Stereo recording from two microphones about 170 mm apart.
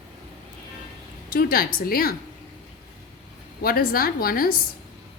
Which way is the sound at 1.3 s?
60° left (ahead or behind).